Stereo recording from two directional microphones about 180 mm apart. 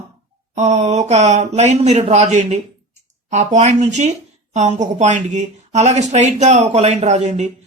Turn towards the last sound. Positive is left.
turn(degrees=-40)  # may be behind; listen again after turning